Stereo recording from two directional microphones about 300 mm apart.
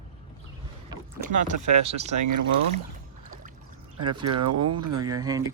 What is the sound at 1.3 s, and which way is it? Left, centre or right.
Speech, right.